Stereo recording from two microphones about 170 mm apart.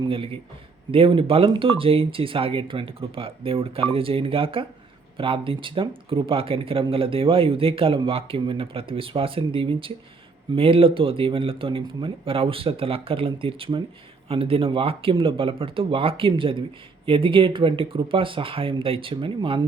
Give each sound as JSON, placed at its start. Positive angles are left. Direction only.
{"t": 0.0, "sound": "speech", "side_deg": -30}